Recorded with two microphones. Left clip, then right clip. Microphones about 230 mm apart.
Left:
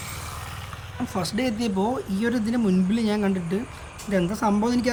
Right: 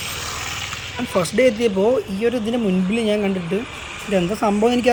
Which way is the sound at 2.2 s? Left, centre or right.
Centre.